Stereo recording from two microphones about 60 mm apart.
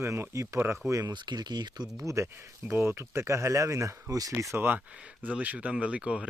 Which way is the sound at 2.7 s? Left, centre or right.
Right.